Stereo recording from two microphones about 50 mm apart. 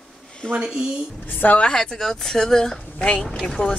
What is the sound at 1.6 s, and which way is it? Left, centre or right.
Speech, centre.